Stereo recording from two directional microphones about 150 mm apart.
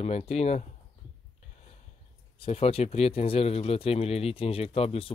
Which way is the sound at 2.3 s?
40° left (ahead or behind).